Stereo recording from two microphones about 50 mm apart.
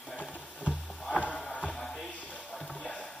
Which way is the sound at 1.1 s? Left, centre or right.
Left.